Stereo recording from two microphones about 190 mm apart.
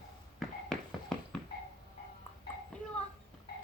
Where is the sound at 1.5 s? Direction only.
55° left (ahead or behind).